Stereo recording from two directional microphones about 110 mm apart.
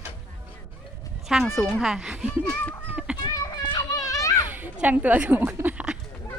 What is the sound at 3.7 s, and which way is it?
Children playing, 30° left (ahead or behind).